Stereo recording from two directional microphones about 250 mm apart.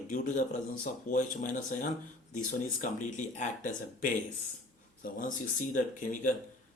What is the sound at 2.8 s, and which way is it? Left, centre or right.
Speech, left.